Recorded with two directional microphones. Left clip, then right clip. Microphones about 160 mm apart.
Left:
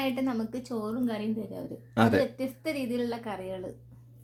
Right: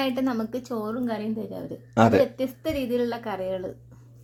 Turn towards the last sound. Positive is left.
turn(degrees=-25)  # may be behind; listen again after turning